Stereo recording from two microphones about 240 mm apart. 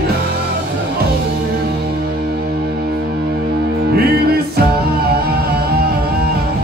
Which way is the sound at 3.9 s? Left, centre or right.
Right.